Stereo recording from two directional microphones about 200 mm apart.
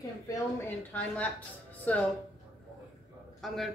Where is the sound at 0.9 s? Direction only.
5° left (ahead or behind).